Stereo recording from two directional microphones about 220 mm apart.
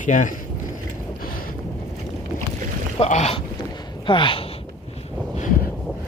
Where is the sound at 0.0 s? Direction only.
35° left (ahead or behind).